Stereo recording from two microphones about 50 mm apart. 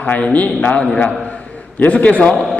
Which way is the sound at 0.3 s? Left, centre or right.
Left.